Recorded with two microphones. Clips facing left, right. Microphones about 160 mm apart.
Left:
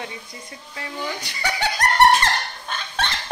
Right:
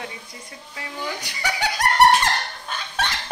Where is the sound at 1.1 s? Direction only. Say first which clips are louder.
Left 1 dB; 15° right (ahead or behind).